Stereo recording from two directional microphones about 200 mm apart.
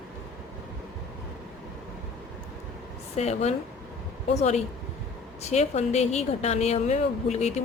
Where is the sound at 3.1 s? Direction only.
30° left (ahead or behind).